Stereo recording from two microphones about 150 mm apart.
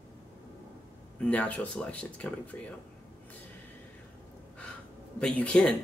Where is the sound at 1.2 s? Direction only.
10° left (ahead or behind).